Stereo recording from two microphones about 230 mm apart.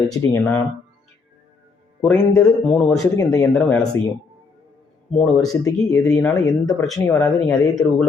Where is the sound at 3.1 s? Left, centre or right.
Centre.